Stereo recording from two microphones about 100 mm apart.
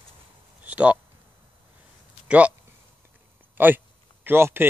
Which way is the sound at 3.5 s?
20° right (ahead or behind).